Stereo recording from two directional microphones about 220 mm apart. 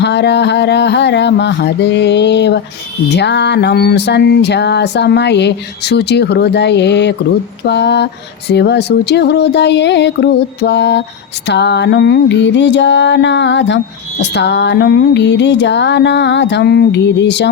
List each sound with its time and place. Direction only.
0.0 s music: 50° left (ahead or behind)